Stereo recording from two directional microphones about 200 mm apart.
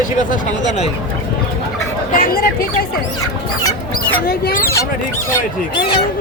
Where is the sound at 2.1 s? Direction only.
45° left (ahead or behind).